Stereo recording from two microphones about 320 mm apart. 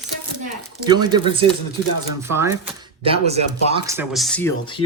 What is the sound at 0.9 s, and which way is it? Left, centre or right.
Speech, centre.